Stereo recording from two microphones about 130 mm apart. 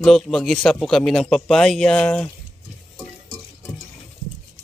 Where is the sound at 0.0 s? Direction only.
5° left (ahead or behind).